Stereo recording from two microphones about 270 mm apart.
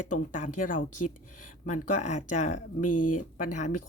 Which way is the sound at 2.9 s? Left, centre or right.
Left.